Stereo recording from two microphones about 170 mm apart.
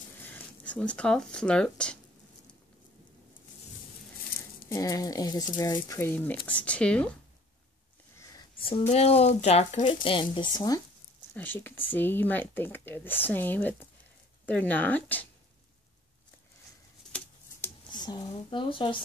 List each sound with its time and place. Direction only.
0.7 s speech: 5° left (ahead or behind)
4.6 s speech: 20° left (ahead or behind)
8.2 s a sound: 20° left (ahead or behind)
8.5 s speech: 35° left (ahead or behind)
11.3 s speech: 10° left (ahead or behind)
17.8 s a woman's voice: 25° left (ahead or behind)